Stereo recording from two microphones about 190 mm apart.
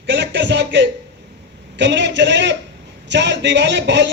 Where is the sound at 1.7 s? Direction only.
70° right (ahead or behind).